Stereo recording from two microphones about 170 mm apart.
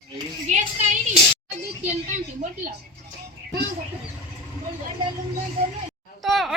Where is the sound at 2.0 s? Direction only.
45° right (ahead or behind).